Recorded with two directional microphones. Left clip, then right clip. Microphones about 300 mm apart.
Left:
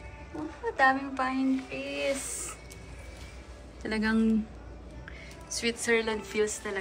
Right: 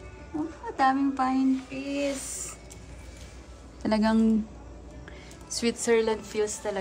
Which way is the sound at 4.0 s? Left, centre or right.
Centre.